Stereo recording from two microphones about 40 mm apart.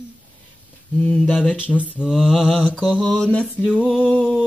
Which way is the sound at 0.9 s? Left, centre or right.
Left.